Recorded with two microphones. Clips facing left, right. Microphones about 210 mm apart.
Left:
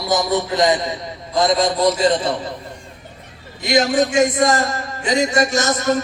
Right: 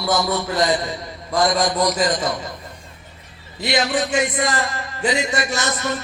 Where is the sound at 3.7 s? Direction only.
45° left (ahead or behind).